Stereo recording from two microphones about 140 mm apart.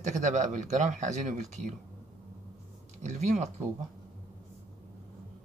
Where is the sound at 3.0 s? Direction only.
55° right (ahead or behind).